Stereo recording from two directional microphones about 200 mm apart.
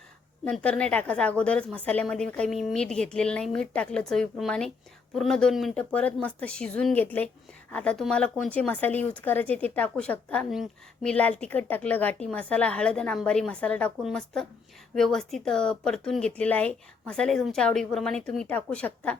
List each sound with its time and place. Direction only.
0.4 s a woman's voice: 5° left (ahead or behind)